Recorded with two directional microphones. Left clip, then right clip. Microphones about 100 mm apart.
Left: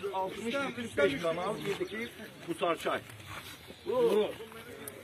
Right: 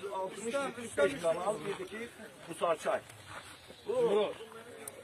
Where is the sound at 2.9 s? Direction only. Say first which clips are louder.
Even; 25° right (ahead or behind).